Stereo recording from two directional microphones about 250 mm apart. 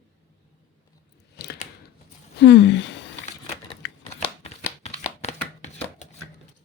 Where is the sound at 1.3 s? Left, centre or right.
Left.